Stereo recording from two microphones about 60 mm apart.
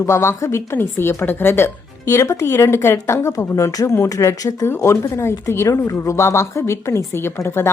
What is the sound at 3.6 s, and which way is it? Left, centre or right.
Speech, left.